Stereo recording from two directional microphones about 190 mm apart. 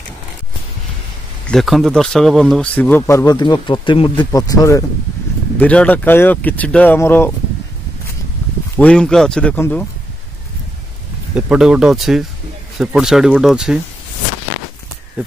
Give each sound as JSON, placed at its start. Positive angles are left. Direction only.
{"t": 1.5, "sound": "speech", "side_deg": 0}
{"t": 3.0, "sound": "speech", "side_deg": 15}
{"t": 5.6, "sound": "speech", "side_deg": 5}
{"t": 8.7, "sound": "speech", "side_deg": 5}
{"t": 11.3, "sound": "speech", "side_deg": -5}